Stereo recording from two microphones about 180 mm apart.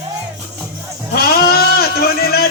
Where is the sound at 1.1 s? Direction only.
60° left (ahead or behind).